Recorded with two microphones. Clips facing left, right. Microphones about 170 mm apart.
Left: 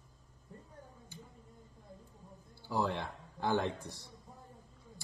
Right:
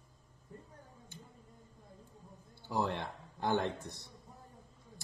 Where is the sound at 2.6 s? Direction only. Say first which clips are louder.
Even; 20° right (ahead or behind).